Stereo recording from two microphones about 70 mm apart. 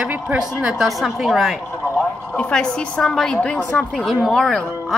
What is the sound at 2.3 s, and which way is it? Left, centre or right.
A woman's voice, centre.